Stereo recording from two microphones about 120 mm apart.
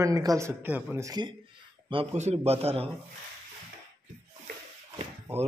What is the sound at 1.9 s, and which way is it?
A man's voice, 55° right (ahead or behind).